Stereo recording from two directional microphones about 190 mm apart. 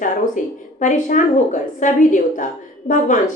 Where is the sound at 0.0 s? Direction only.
40° left (ahead or behind).